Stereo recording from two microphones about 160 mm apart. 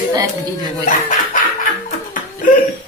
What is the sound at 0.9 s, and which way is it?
Speech, 55° left (ahead or behind).